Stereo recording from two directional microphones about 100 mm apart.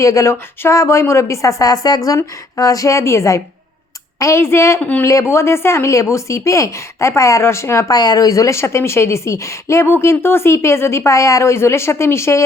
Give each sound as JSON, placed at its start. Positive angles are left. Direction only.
{"t": 0.0, "sound": "a woman's voice", "side_deg": 30}
{"t": 4.8, "sound": "speech", "side_deg": 15}
{"t": 5.0, "sound": "a woman's voice", "side_deg": 30}
{"t": 7.9, "sound": "a woman's voice", "side_deg": 40}